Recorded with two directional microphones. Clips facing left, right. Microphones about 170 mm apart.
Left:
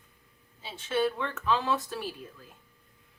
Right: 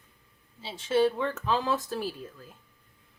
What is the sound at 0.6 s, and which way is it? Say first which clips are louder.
Speech: right 4 dB; 35° right (ahead or behind).